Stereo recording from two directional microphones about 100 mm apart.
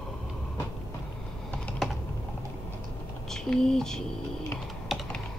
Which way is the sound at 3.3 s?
5° left (ahead or behind).